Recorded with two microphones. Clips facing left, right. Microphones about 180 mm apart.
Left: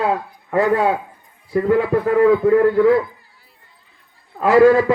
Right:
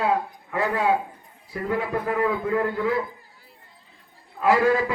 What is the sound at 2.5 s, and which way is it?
Speech, 45° left (ahead or behind).